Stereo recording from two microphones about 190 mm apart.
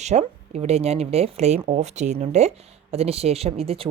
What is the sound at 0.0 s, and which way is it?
Speech, 35° right (ahead or behind).